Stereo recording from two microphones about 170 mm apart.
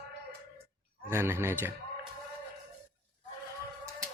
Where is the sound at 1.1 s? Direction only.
15° right (ahead or behind).